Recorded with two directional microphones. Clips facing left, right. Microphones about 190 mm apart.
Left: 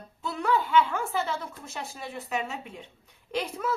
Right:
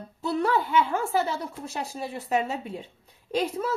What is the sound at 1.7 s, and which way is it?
A woman's voice, 35° right (ahead or behind).